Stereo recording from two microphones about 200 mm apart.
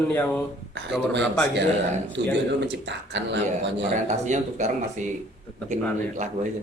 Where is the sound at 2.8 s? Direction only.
65° right (ahead or behind).